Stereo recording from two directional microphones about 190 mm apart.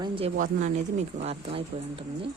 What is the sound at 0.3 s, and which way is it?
A woman's voice, 40° right (ahead or behind).